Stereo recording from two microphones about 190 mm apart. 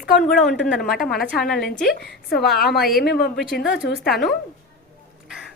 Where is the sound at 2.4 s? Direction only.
Centre (ahead or behind).